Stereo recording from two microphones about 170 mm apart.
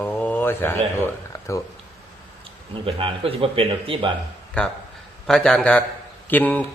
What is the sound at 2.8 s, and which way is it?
Speech, 30° right (ahead or behind).